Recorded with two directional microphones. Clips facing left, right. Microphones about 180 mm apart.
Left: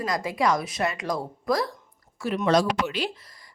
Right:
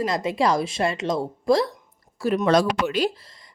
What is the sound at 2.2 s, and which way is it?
Speech, 40° right (ahead or behind).